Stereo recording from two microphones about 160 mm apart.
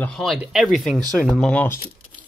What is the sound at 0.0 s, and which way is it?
Speech, centre (ahead or behind).